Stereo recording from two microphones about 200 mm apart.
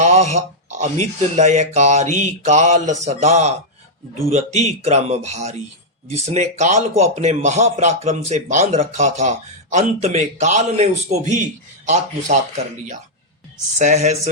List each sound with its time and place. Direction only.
0.0 s a man's voice: 35° right (ahead or behind)
13.7 s a man's voice: 35° right (ahead or behind)